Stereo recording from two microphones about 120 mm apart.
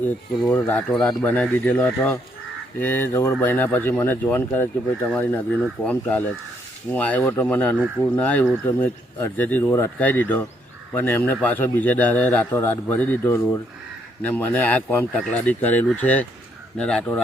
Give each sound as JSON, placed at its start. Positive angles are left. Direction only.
{"t": 0.0, "sound": "speech", "side_deg": 15}
{"t": 2.7, "sound": "a sound", "side_deg": 15}
{"t": 3.4, "sound": "speech", "side_deg": 15}